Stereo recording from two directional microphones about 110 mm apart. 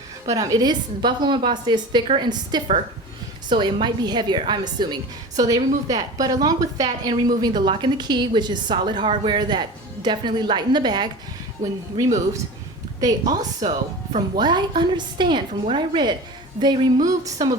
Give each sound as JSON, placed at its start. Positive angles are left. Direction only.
{"t": 0.3, "sound": "a woman's voice", "side_deg": -35}
{"t": 11.9, "sound": "a woman's voice", "side_deg": -30}